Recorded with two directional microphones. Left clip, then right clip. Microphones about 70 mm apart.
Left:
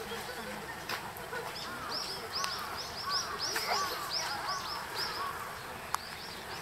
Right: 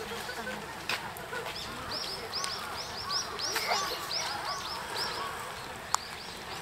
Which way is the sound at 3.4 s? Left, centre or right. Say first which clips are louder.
Right 2 dB; right.